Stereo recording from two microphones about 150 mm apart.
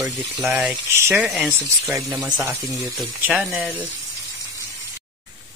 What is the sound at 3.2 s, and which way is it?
Speech, centre (ahead or behind).